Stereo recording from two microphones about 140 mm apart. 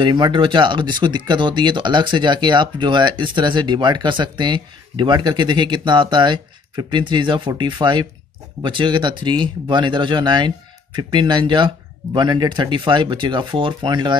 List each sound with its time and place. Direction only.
0.0 s speech: 35° right (ahead or behind)